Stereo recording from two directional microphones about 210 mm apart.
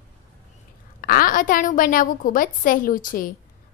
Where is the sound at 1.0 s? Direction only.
40° left (ahead or behind).